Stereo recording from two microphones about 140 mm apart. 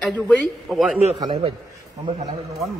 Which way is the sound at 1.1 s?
30° right (ahead or behind).